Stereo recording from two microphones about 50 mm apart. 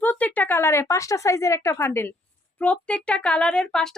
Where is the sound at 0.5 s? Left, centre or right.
Left.